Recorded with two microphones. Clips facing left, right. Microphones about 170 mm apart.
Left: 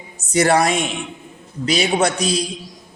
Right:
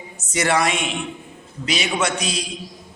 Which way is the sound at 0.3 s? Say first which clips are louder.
Left 4 dB; 35° left (ahead or behind).